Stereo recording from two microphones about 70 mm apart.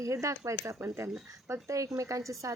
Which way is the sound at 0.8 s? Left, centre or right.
Right.